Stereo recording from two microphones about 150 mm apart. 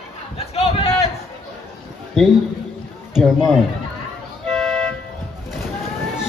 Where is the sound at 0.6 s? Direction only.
40° left (ahead or behind).